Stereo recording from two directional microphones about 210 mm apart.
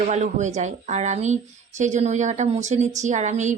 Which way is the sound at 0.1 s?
35° right (ahead or behind).